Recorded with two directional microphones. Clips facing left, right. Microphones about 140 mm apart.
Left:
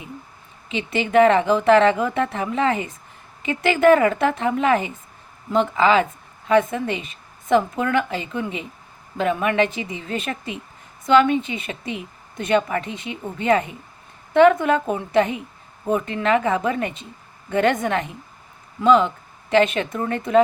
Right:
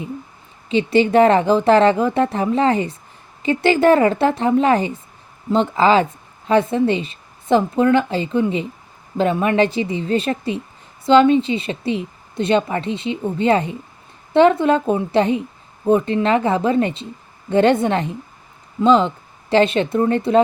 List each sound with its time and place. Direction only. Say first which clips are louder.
0.7 s a woman's voice: right 6 dB; 35° right (ahead or behind)